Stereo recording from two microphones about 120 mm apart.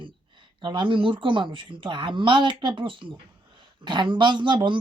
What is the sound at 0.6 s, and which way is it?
Speech, 45° right (ahead or behind).